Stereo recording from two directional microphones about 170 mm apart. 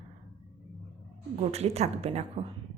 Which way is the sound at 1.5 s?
40° right (ahead or behind).